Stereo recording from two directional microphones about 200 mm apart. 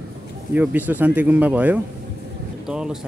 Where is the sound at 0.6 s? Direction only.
10° right (ahead or behind).